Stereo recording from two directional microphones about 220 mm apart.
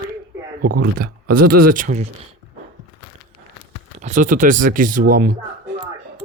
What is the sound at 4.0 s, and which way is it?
Speech, 35° right (ahead or behind).